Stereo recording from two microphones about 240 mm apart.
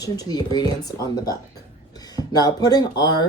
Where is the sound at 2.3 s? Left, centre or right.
Centre.